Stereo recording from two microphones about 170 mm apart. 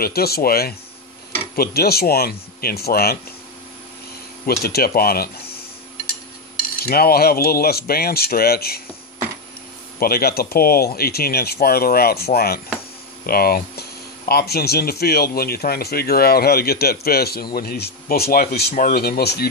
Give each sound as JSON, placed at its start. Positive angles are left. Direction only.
{"t": 0.0, "sound": "speech", "side_deg": 65}
{"t": 4.5, "sound": "speech", "side_deg": 65}
{"t": 6.8, "sound": "speech", "side_deg": 65}
{"t": 9.9, "sound": "speech", "side_deg": 65}